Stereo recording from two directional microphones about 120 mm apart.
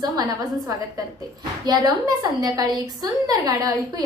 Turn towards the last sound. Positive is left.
turn(degrees=-30)  # may be behind; listen again after turning